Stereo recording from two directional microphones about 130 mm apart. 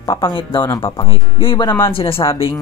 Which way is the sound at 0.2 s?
40° left (ahead or behind).